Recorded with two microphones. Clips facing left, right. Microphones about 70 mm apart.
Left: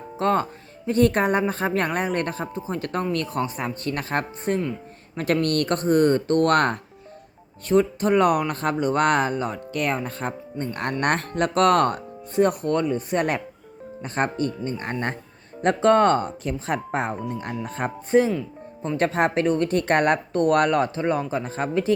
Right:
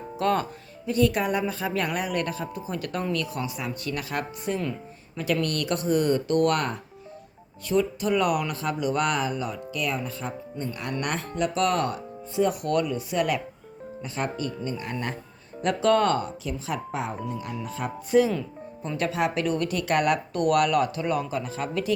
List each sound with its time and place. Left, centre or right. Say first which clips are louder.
0.2 s a woman's voice: left 3 dB; left
0.9 s a woman's voice: left 4 dB; left
12.6 s a woman's voice: left 2 dB; left